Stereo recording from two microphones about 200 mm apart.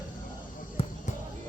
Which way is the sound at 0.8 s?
30° left (ahead or behind).